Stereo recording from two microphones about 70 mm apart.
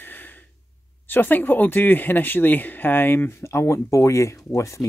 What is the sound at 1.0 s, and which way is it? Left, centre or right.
Speech, left.